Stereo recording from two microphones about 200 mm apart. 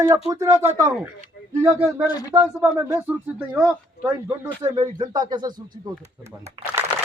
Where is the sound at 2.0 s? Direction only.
20° left (ahead or behind).